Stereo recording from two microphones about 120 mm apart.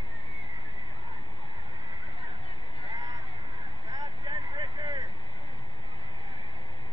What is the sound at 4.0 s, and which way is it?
Vehicle, 35° right (ahead or behind).